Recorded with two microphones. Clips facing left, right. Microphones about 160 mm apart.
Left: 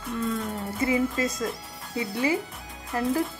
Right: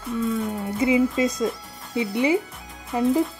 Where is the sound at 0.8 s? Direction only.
20° right (ahead or behind).